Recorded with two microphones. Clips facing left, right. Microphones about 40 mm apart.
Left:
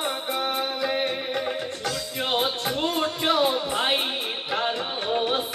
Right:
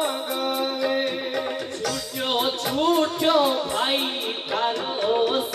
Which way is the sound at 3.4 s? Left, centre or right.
Centre.